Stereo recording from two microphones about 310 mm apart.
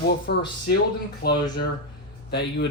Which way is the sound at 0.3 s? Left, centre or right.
Left.